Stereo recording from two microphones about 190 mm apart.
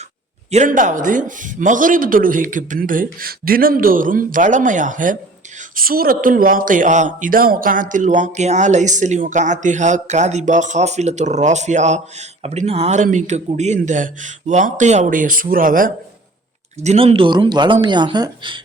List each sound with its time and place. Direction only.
0.5 s a man's voice: 40° right (ahead or behind)
16.8 s speech: 35° right (ahead or behind)